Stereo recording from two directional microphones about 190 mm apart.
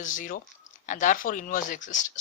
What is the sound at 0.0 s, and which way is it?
Speech, 45° left (ahead or behind).